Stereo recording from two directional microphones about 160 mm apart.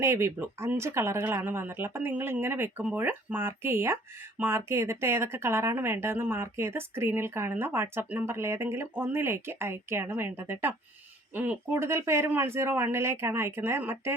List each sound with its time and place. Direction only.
0.0 s speech: 15° right (ahead or behind)